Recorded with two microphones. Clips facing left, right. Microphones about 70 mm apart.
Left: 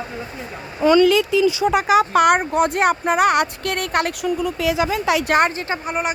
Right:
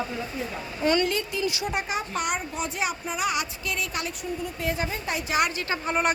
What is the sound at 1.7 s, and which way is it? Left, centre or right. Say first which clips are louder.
Speech: left 13 dB; left.